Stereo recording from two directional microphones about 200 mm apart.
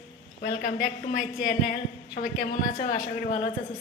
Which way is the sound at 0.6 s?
40° left (ahead or behind).